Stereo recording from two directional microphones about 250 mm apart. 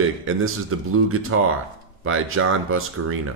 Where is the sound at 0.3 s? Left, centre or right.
Right.